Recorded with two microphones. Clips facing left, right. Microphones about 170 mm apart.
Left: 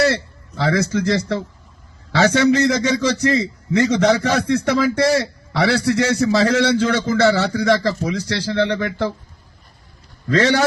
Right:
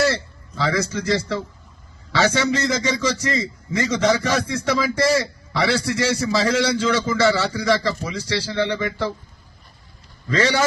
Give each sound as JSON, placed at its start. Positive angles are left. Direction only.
{"t": 0.6, "sound": "a man's voice", "side_deg": 55}
{"t": 2.1, "sound": "a man's voice", "side_deg": 60}